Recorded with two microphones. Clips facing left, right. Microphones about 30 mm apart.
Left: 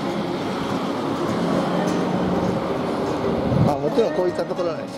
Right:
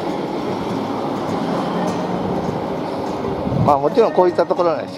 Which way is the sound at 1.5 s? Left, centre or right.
Right.